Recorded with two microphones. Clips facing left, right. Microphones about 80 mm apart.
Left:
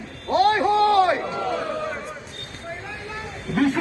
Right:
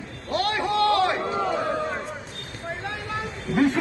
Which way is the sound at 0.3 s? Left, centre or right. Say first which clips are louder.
Left 6 dB; centre.